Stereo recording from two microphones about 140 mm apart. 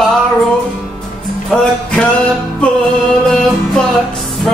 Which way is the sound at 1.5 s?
5° left (ahead or behind).